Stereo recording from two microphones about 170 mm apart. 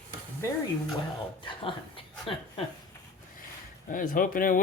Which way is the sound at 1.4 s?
30° left (ahead or behind).